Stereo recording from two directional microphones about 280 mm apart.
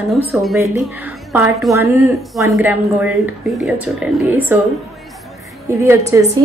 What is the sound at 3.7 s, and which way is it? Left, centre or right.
Speech, centre.